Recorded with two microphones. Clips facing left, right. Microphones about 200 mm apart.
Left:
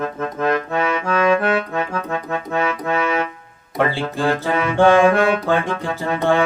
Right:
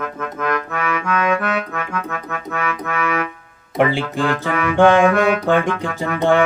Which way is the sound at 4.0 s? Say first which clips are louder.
Even; 35° left (ahead or behind).